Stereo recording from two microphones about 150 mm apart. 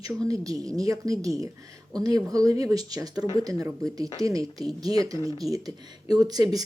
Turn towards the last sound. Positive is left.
turn(degrees=-25)  # may be behind; listen again after turning